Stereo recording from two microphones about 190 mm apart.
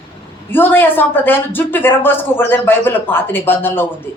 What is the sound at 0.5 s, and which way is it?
A woman's voice, 10° left (ahead or behind).